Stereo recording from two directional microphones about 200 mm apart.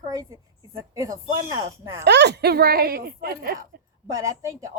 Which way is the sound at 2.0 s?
60° right (ahead or behind).